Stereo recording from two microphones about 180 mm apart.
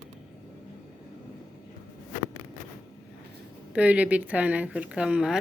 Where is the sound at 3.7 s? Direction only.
5° right (ahead or behind).